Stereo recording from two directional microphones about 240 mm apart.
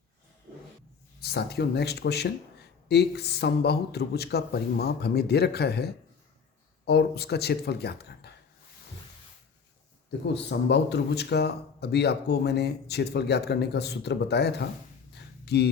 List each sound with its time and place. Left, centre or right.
1.2 s speech: left
10.3 s speech: left
15.1 s a sound: left